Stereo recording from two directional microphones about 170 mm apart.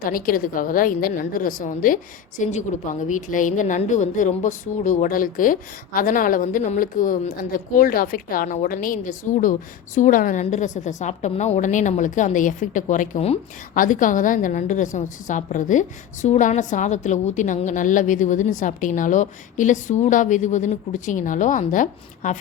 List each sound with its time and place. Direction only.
0.0 s a woman's voice: 55° left (ahead or behind); by 13.4 s 40° left (ahead or behind)
13.7 s a woman's voice: 50° left (ahead or behind)